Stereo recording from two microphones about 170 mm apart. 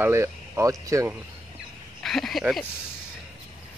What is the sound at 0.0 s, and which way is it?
Speech, 15° right (ahead or behind).